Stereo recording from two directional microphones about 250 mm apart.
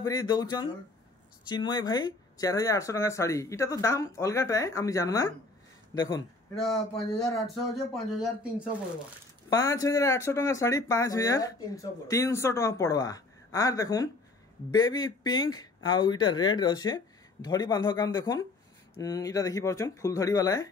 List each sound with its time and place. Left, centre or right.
0.0 s speech: centre
6.5 s speech: centre
9.5 s speech: centre